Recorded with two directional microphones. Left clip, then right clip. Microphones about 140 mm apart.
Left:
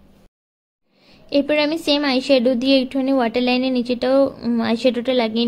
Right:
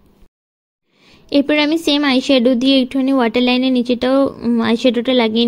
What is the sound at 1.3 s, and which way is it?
A woman's voice, 40° right (ahead or behind).